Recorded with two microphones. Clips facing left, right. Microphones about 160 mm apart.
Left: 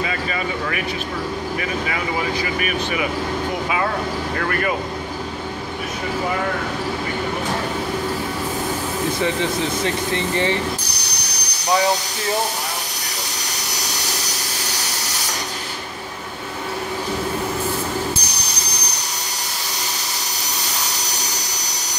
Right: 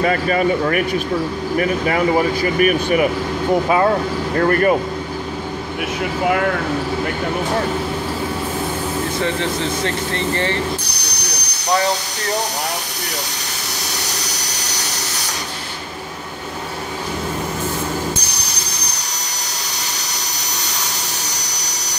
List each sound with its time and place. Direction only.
0.0 s speech: 45° right (ahead or behind)
9.2 s speech: 15° left (ahead or behind)